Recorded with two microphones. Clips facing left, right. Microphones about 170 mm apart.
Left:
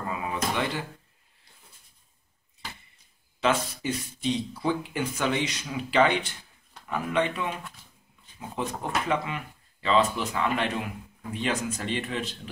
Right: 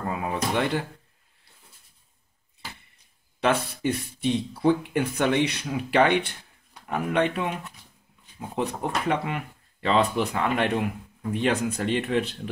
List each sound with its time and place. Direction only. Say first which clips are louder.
0.1 s a sound: right 3 dB; 55° right (ahead or behind)
3.3 s speech: right 2 dB; 55° right (ahead or behind)
9.0 s speech: right 2 dB; 60° right (ahead or behind)